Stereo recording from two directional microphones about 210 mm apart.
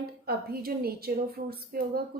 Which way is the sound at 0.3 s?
45° right (ahead or behind).